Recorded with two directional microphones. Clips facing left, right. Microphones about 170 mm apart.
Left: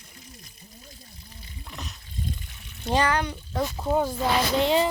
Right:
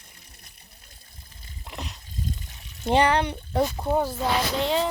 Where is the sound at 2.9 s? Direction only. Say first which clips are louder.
Right 3 dB; 25° right (ahead or behind).